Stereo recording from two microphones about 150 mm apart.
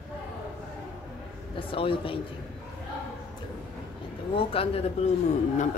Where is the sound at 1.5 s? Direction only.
35° left (ahead or behind).